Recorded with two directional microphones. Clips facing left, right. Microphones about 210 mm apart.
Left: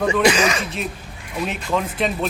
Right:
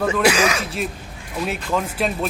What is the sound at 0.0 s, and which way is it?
Speech, 5° right (ahead or behind).